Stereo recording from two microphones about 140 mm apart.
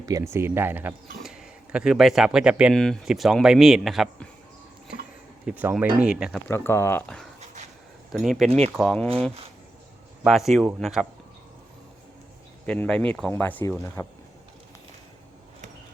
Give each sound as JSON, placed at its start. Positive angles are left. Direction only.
{"t": 0.0, "sound": "speech", "side_deg": -25}
{"t": 2.7, "sound": "speech", "side_deg": 5}
{"t": 5.5, "sound": "speech", "side_deg": -15}
{"t": 6.5, "sound": "speech", "side_deg": 20}
{"t": 8.1, "sound": "speech", "side_deg": 0}
{"t": 10.2, "sound": "speech", "side_deg": 0}
{"t": 12.6, "sound": "speech", "side_deg": 10}